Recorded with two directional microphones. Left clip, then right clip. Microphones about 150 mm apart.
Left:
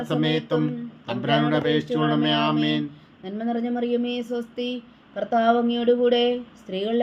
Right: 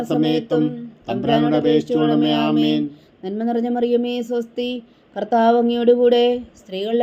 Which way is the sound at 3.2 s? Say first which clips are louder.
Right 6 dB; 45° right (ahead or behind).